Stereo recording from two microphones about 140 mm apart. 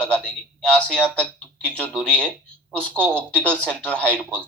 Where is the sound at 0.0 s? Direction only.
10° left (ahead or behind).